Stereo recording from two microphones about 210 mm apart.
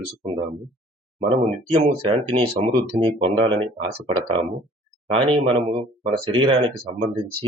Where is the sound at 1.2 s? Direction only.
25° right (ahead or behind).